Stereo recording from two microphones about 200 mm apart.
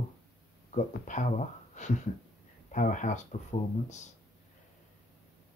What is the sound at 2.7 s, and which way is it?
Speech, 40° left (ahead or behind).